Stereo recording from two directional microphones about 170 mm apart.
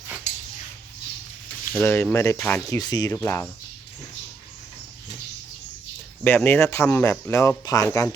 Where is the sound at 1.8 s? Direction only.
15° left (ahead or behind).